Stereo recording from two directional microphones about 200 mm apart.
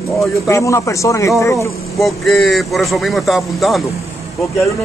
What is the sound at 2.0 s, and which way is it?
A man's voice, centre (ahead or behind).